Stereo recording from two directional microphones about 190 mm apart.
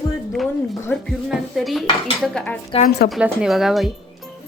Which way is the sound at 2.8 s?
55° left (ahead or behind).